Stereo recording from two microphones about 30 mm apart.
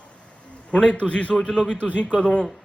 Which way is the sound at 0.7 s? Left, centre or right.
Left.